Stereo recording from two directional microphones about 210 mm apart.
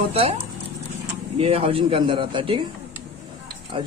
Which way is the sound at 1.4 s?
30° right (ahead or behind).